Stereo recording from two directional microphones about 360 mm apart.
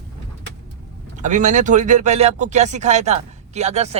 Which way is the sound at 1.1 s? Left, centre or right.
Centre.